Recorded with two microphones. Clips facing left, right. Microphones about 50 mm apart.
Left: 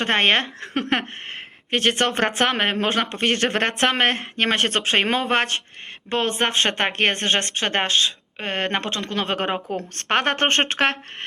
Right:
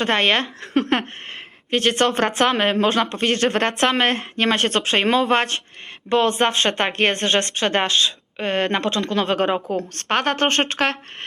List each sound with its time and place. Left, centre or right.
0.0 s speech: left
0.7 s a sound: centre
1.7 s a woman's voice: centre